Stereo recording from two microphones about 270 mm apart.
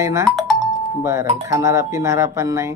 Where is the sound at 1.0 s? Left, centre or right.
Centre.